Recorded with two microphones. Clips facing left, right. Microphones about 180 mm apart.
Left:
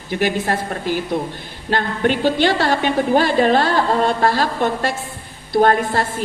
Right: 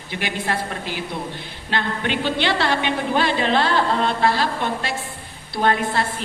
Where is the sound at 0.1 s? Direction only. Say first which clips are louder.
Left 6 dB; 45° left (ahead or behind).